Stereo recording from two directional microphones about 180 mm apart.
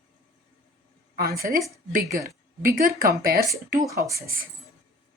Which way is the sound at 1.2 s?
55° right (ahead or behind).